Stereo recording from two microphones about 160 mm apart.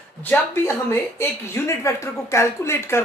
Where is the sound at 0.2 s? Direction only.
15° left (ahead or behind).